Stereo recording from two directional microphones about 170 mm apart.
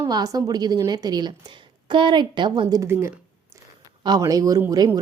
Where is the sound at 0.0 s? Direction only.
20° right (ahead or behind).